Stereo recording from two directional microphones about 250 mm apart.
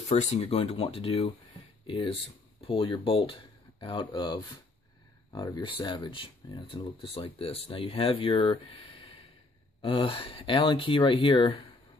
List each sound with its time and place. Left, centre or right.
0.1 s speech: left
2.6 s speech: left